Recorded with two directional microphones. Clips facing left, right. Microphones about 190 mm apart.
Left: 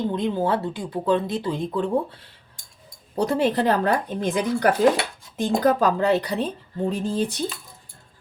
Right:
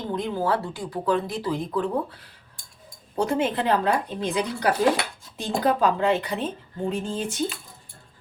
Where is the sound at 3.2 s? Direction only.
35° left (ahead or behind).